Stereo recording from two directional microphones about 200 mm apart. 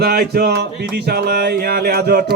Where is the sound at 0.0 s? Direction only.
50° right (ahead or behind).